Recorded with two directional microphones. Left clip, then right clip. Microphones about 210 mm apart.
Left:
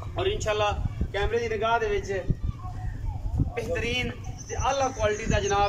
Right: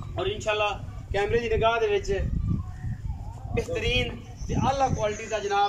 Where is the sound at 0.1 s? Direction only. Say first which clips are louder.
Even; centre (ahead or behind).